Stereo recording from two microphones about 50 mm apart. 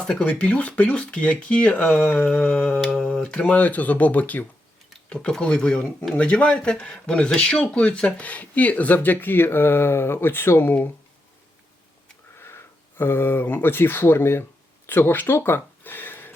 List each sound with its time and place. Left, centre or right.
0.1 s speech: left
5.0 s speech: left
12.4 s speech: left
15.4 s speech: left
15.8 s a sound: left